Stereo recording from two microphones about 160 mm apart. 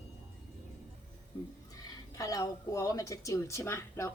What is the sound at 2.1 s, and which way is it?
Speech, 20° left (ahead or behind).